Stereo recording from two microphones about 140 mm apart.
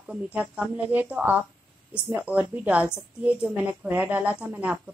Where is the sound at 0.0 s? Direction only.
10° right (ahead or behind).